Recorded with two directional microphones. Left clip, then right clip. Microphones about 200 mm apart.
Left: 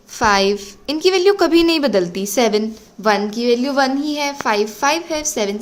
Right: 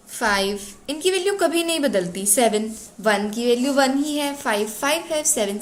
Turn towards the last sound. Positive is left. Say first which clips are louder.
# left 2 dB
turn(degrees=40)  # may be behind; listen again after turning